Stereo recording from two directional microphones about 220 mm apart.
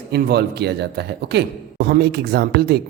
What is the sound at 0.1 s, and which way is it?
Speech, 45° right (ahead or behind).